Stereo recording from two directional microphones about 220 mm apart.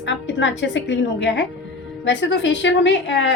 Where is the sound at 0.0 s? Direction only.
55° left (ahead or behind).